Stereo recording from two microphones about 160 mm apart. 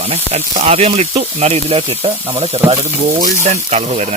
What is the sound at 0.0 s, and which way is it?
Speech, 40° right (ahead or behind).